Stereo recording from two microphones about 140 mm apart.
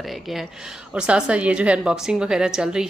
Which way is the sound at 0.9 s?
5° right (ahead or behind).